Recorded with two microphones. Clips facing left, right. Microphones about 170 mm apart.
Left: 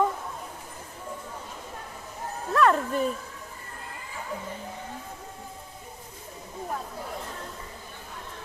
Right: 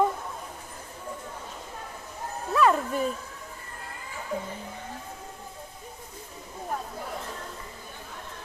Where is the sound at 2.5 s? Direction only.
5° right (ahead or behind).